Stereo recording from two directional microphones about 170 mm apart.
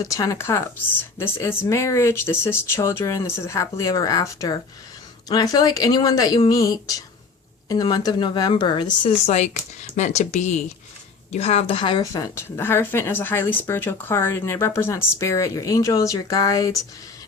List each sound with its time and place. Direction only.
0.0 s speech: 20° left (ahead or behind)
12.1 s speech: 15° left (ahead or behind)